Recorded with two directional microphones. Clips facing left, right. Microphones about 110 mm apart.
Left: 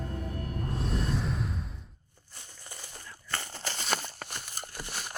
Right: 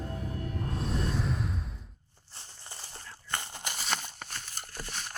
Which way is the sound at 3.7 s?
Centre (ahead or behind).